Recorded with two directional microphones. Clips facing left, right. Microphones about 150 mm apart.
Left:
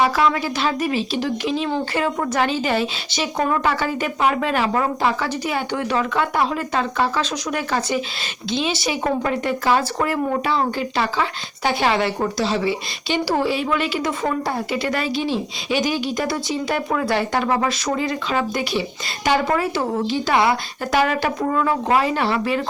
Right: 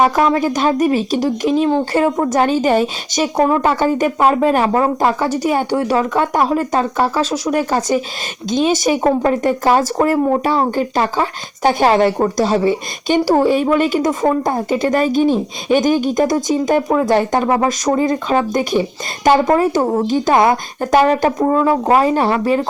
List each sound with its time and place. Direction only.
0.0 s speech: 40° right (ahead or behind)
2.0 s a woman's voice: 25° right (ahead or behind)
2.3 s a woman's voice: 40° right (ahead or behind)